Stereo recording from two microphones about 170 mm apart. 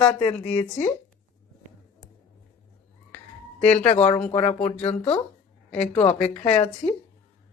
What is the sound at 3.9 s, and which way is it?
Speech, 35° left (ahead or behind).